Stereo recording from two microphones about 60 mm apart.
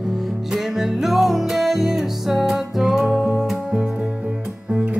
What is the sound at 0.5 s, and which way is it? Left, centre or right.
Music, centre.